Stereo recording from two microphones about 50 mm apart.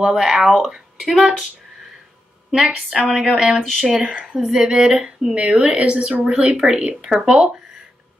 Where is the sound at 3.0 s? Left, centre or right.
Centre.